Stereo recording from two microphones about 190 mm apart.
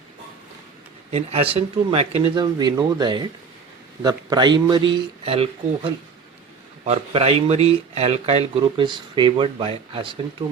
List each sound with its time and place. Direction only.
1.1 s a man's voice: 30° right (ahead or behind)